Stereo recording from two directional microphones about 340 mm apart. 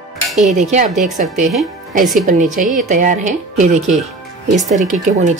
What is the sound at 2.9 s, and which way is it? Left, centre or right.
Speech, right.